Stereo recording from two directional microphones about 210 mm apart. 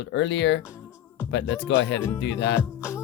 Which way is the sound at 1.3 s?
55° left (ahead or behind).